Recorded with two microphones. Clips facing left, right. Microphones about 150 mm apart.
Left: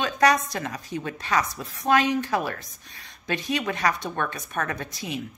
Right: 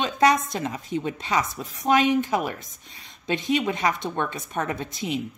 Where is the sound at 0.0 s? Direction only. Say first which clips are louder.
Right 1 dB; 20° right (ahead or behind).